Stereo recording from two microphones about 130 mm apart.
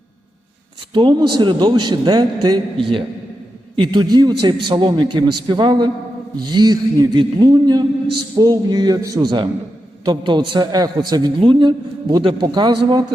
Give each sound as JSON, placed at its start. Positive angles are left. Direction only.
{"t": 0.9, "sound": "a man's voice", "side_deg": -35}
{"t": 3.8, "sound": "a man's voice", "side_deg": -35}